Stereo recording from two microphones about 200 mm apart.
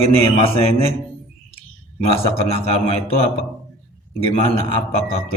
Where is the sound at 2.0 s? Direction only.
30° left (ahead or behind).